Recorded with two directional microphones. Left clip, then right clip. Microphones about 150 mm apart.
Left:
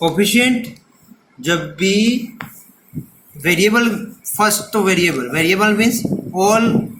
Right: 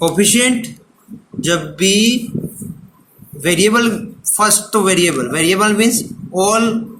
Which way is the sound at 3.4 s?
25° right (ahead or behind).